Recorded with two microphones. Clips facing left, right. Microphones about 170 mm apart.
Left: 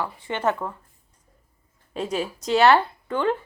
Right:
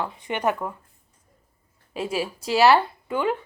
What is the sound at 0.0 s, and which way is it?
Speech, 15° right (ahead or behind).